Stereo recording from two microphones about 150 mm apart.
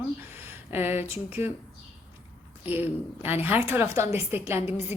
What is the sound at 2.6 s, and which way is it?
A woman's voice, 15° right (ahead or behind).